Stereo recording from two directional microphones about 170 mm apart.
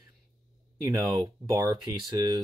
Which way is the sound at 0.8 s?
20° right (ahead or behind).